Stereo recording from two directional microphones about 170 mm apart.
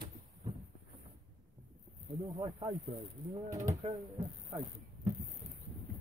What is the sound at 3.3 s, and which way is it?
Speech, 20° right (ahead or behind).